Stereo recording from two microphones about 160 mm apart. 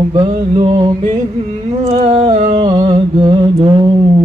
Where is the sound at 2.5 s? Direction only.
35° right (ahead or behind).